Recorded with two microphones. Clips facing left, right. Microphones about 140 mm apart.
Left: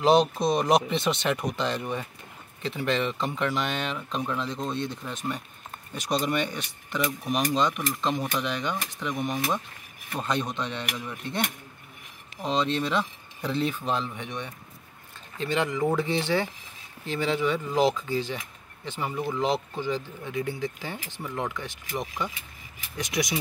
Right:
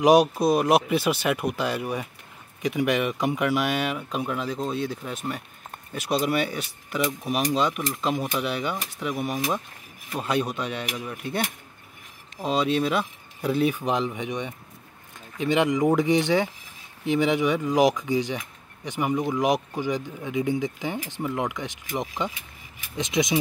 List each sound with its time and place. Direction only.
0.0 s speech: 10° right (ahead or behind)